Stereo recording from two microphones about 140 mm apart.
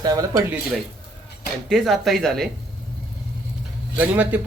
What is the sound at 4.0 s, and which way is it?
Speech, 10° right (ahead or behind).